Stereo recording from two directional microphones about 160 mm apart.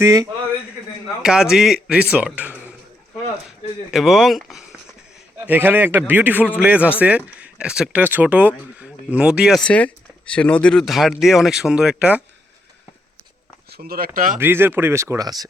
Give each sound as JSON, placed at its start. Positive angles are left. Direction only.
{"t": 0.0, "sound": "a man's voice", "side_deg": -20}
{"t": 1.2, "sound": "speech", "side_deg": -5}
{"t": 3.9, "sound": "speech", "side_deg": 0}
{"t": 5.5, "sound": "speech", "side_deg": -10}
{"t": 13.7, "sound": "speech", "side_deg": -75}
{"t": 14.3, "sound": "speech", "side_deg": -15}